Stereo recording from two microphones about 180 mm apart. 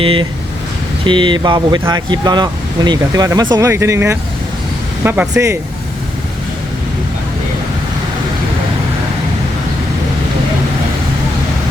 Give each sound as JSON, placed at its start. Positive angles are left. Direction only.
{"t": 0.0, "sound": "speech", "side_deg": -30}